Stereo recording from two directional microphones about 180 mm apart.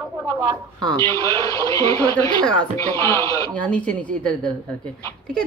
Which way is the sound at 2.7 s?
15° left (ahead or behind).